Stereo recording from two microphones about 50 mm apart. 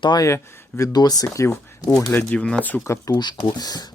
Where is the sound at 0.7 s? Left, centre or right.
Left.